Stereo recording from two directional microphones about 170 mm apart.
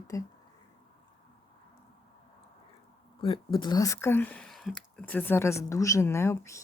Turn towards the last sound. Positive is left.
turn(degrees=15)  # may be behind; listen again after turning